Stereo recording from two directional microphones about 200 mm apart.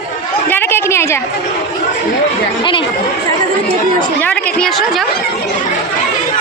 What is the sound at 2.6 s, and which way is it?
Speech, 25° left (ahead or behind).